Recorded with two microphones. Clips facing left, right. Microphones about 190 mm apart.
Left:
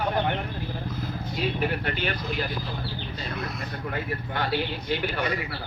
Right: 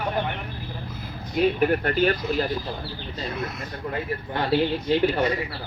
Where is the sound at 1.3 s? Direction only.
45° right (ahead or behind).